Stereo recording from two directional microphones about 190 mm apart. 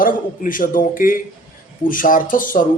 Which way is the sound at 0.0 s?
45° left (ahead or behind).